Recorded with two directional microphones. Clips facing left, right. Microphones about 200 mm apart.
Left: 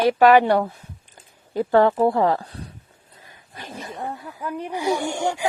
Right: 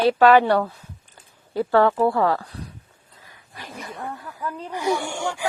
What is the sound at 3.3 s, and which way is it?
Snake, 25° left (ahead or behind).